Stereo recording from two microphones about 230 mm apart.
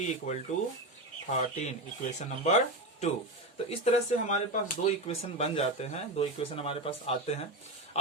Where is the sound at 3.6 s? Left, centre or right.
Left.